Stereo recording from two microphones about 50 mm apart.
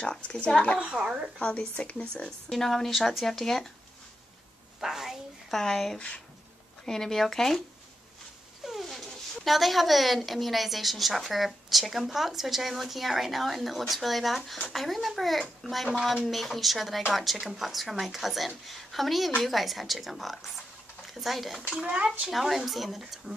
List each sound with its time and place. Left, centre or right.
0.0 s speech: centre
1.0 s a woman's voice: centre
1.4 s speech: left
2.2 s speech: centre
4.7 s a woman's voice: centre
5.5 s speech: centre
5.9 s speech: left
6.9 s speech: centre
8.8 s speech: centre
21.8 s speech: centre
22.3 s speech: centre